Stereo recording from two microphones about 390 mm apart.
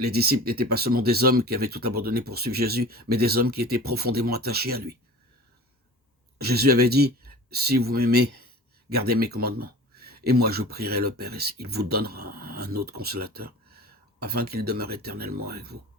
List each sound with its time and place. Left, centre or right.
0.0 s speech: right
6.4 s speech: right